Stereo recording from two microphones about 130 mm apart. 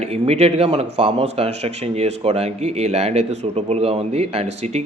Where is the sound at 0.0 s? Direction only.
55° right (ahead or behind).